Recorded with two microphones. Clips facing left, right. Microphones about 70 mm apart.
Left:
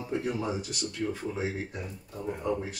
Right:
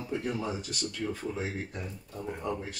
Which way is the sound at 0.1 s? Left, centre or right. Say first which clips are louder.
Left 2 dB; centre.